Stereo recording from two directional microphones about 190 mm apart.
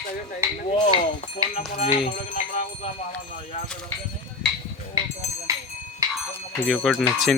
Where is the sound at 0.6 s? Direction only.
25° left (ahead or behind).